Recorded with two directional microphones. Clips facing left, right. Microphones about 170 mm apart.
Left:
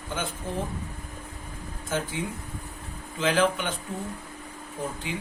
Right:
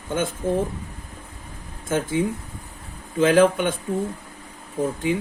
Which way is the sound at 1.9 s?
50° right (ahead or behind).